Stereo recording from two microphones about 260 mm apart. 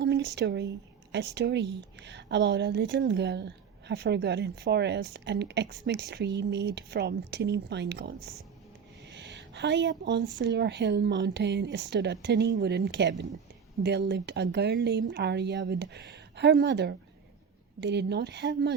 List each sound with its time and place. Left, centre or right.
0.0 s a woman's voice: right